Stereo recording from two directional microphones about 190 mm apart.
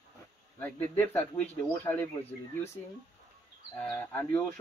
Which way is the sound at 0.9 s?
10° left (ahead or behind).